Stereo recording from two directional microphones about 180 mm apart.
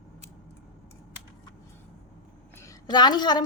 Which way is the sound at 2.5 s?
20° left (ahead or behind).